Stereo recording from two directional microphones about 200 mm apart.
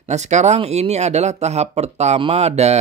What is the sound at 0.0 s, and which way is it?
Speech, 35° right (ahead or behind).